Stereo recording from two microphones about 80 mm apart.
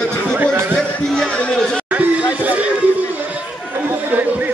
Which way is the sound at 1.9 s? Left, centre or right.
Centre.